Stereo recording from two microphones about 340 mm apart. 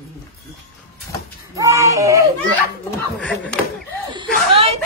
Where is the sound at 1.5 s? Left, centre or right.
Centre.